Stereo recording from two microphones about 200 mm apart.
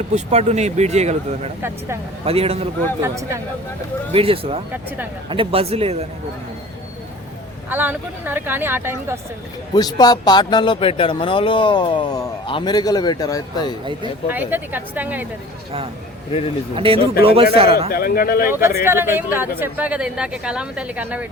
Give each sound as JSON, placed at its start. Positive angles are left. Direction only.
{"t": 0.1, "sound": "a man's voice", "side_deg": -35}
{"t": 3.0, "sound": "speech", "side_deg": -15}
{"t": 4.1, "sound": "a man's voice", "side_deg": -30}
{"t": 7.7, "sound": "speech", "side_deg": -10}
{"t": 9.7, "sound": "speech", "side_deg": 20}
{"t": 14.3, "sound": "speech", "side_deg": -10}
{"t": 16.7, "sound": "a man's voice", "side_deg": -25}
{"t": 17.7, "sound": "a man's voice", "side_deg": 50}
{"t": 18.9, "sound": "speech", "side_deg": -10}